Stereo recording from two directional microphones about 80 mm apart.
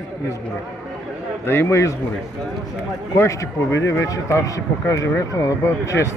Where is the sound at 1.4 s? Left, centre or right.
Left.